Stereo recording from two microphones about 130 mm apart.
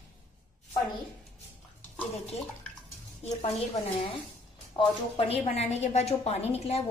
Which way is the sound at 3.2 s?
55° left (ahead or behind).